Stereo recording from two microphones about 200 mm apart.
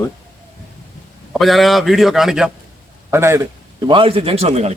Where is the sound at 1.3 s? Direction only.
Centre (ahead or behind).